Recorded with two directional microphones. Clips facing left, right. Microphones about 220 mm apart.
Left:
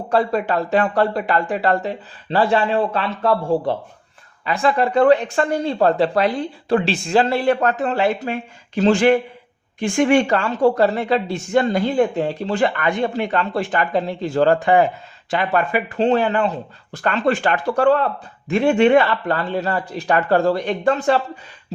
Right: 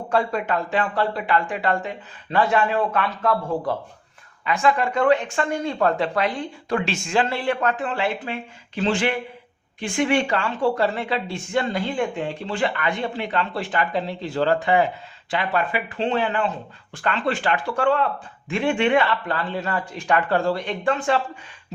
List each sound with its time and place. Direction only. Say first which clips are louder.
0.1 s speech: left 4 dB; 35° left (ahead or behind)